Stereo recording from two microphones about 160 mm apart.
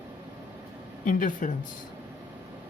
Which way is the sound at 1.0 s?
55° left (ahead or behind).